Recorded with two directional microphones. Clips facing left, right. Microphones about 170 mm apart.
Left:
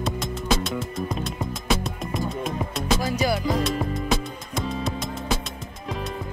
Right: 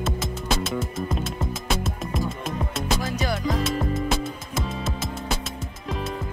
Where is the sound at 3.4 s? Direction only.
Centre (ahead or behind).